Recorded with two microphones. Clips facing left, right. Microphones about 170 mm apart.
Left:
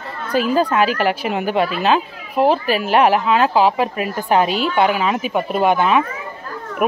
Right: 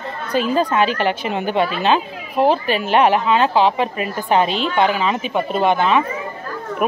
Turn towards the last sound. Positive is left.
turn(degrees=10)  # may be behind; listen again after turning